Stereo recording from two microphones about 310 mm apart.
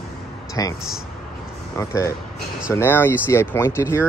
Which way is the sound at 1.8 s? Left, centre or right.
Centre.